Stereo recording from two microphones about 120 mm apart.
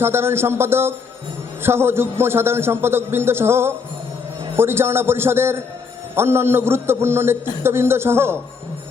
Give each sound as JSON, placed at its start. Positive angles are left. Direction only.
{"t": 0.0, "sound": "a man's voice", "side_deg": -20}